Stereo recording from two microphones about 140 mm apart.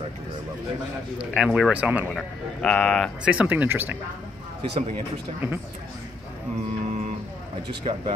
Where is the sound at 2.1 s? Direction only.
5° left (ahead or behind).